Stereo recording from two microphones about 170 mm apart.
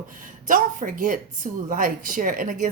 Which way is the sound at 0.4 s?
50° right (ahead or behind).